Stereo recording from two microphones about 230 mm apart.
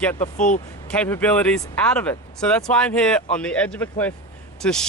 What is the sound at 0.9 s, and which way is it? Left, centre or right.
Speech, centre.